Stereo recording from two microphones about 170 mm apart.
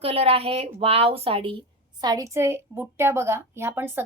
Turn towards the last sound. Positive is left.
turn(degrees=-10)  # may be behind; listen again after turning